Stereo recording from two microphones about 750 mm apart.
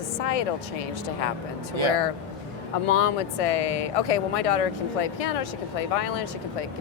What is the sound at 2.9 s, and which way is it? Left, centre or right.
Speech, left.